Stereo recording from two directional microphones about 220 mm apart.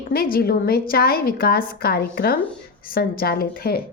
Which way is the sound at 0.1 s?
45° left (ahead or behind).